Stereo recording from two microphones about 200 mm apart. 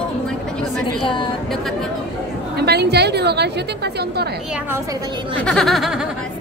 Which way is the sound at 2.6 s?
55° right (ahead or behind).